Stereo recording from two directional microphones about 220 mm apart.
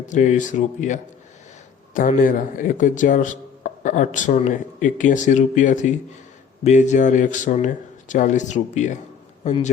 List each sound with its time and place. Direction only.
0.1 s speech: 35° left (ahead or behind)